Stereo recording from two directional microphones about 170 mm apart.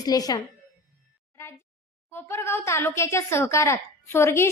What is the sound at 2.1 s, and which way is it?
Speech, 15° left (ahead or behind).